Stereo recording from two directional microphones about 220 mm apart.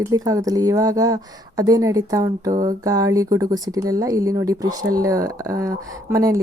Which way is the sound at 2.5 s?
30° right (ahead or behind).